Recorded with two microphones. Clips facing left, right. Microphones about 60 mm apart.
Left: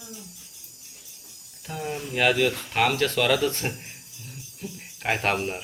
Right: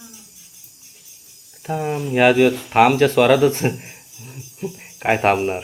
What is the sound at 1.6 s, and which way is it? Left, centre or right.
Speech, right.